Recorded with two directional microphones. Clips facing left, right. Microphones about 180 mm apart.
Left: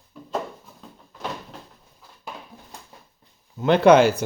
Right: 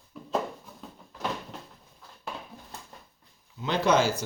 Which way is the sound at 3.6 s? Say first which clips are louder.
Left 10 dB; 60° left (ahead or behind).